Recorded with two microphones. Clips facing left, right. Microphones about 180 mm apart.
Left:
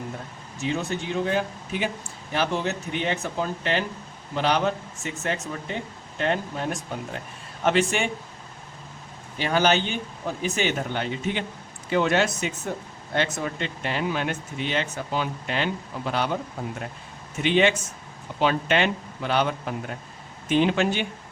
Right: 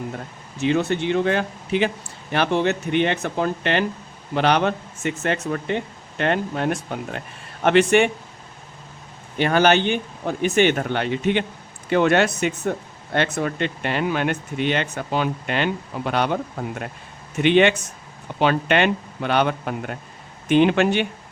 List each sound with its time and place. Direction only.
0.6 s speech: 70° right (ahead or behind)
9.4 s speech: 60° right (ahead or behind)